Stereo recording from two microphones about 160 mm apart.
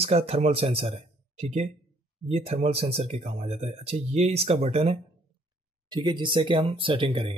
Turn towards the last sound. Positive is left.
turn(degrees=-35)  # may be behind; listen again after turning